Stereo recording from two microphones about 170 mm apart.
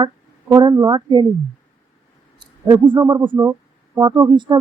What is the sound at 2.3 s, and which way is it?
Speech, 25° right (ahead or behind).